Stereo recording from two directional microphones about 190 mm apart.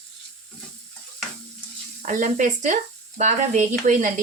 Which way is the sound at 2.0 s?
45° right (ahead or behind).